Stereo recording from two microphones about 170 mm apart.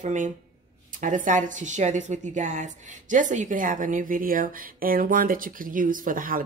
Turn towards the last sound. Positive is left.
turn(degrees=-55)  # may be behind; listen again after turning